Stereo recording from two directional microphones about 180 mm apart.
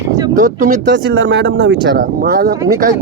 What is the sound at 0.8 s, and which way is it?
Speech, 85° right.